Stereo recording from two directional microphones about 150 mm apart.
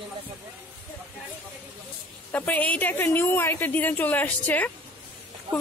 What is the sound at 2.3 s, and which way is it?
A woman's voice, 10° left (ahead or behind).